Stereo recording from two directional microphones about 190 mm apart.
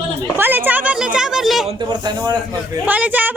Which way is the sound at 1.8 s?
25° right (ahead or behind).